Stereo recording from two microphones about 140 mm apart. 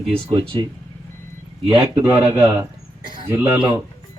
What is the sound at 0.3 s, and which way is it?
Speech, 40° right (ahead or behind).